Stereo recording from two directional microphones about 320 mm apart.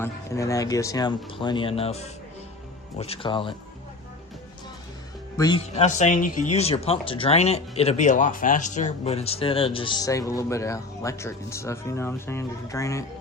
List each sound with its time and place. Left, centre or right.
0.0 s speech: centre
5.4 s speech: centre